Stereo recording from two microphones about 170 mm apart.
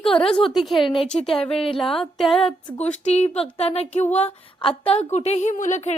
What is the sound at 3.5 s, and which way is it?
Speech, 35° left (ahead or behind).